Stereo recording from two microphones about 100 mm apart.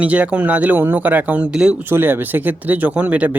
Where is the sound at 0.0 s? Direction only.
15° right (ahead or behind).